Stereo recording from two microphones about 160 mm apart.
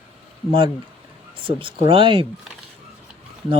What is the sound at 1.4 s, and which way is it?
Speech, 30° right (ahead or behind).